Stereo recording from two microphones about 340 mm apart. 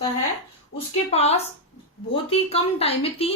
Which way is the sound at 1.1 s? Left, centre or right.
Centre.